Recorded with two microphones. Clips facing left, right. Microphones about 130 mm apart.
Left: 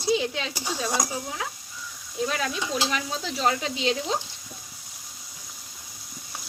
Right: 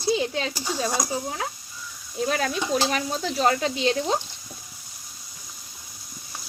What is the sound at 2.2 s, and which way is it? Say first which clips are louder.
Speech: right 3 dB; 45° right (ahead or behind).